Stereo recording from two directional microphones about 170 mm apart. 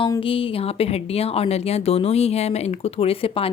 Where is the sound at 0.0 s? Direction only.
30° left (ahead or behind).